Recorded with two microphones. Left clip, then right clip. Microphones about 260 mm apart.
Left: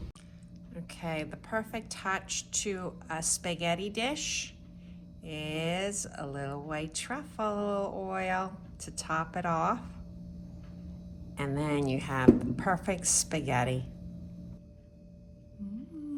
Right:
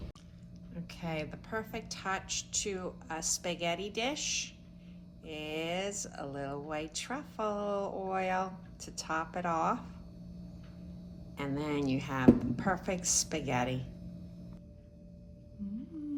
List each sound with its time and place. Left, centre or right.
0.7 s a woman's voice: left
11.3 s a woman's voice: left